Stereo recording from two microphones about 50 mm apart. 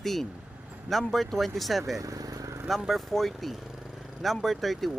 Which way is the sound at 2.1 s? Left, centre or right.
Right.